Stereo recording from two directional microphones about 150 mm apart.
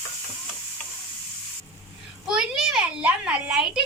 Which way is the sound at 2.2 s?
5° right (ahead or behind).